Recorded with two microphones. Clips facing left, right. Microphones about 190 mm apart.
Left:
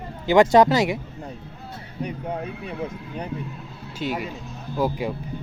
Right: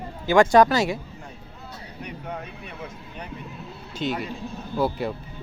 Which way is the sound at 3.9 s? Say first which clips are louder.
Even; 10° left (ahead or behind).